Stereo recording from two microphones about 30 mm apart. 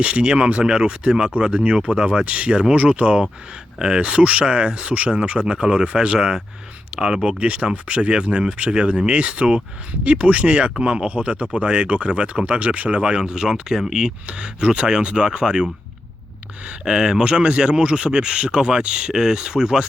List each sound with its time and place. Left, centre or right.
0.0 s speech: right
2.2 s speech: right
2.5 s speech: right
4.0 s speech: right
6.1 s speech: right
7.3 s speech: right
13.1 s speech: right
13.3 s speech: right
14.3 s speech: right
16.8 s speech: centre
17.2 s speech: right